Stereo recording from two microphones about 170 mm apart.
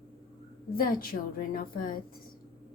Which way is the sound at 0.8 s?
60° left (ahead or behind).